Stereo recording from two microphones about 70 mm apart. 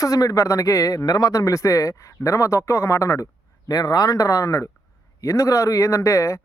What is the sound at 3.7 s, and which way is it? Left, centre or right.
Speech, left.